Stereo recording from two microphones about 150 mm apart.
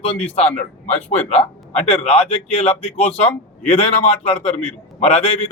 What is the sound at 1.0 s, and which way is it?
A man's voice, 45° left (ahead or behind).